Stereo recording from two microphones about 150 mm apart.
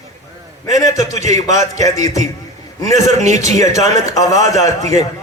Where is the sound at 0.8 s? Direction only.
20° left (ahead or behind).